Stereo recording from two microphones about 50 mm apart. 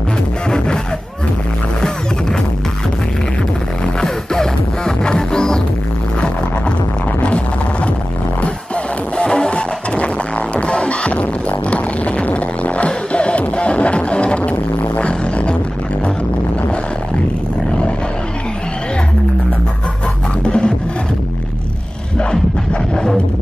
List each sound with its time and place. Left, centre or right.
4.0 s music: centre
7.2 s music: left
9.1 s music: centre
20.4 s music: centre
22.3 s a sound: centre